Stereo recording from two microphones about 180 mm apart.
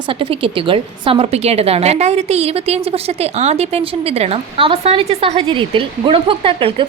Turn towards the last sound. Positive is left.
turn(degrees=-30)  # may be behind; listen again after turning